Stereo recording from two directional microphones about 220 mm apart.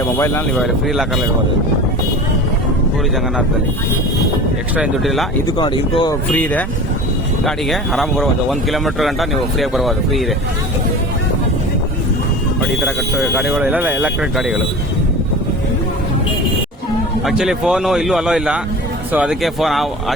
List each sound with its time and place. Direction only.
0.5 s speech: centre (ahead or behind)
4.7 s speech: centre (ahead or behind)
5.5 s speech: 20° left (ahead or behind)
6.3 s speech: 5° left (ahead or behind)
12.8 s speech: centre (ahead or behind)
17.2 s speech: centre (ahead or behind)